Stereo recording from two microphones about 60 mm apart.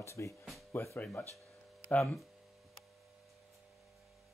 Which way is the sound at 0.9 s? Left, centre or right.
Left.